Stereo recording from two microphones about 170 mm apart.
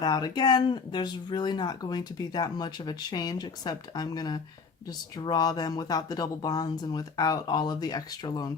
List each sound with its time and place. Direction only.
0.0 s speech: 25° left (ahead or behind)